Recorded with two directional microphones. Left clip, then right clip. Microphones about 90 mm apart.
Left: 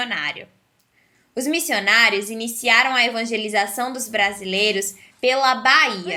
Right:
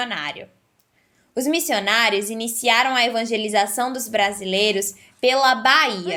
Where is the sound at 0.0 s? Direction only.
25° right (ahead or behind).